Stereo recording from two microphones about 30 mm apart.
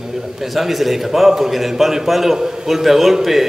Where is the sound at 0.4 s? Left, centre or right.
Centre.